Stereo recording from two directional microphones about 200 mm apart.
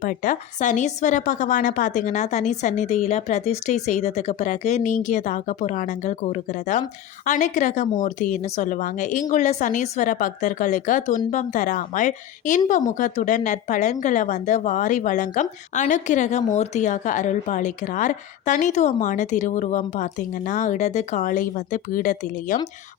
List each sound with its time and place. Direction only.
0.0 s a woman's voice: 40° left (ahead or behind)